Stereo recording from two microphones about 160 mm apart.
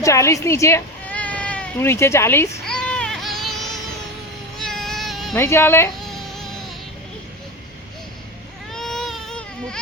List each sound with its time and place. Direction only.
0.0 s speech: 20° left (ahead or behind)
2.6 s baby cry: 5° left (ahead or behind)
4.5 s baby cry: centre (ahead or behind)
5.3 s speech: 15° left (ahead or behind)
6.0 s baby cry: centre (ahead or behind)
8.7 s baby cry: 5° left (ahead or behind)